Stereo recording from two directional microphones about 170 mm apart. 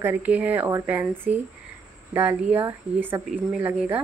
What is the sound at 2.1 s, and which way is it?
Speech, 10° right (ahead or behind).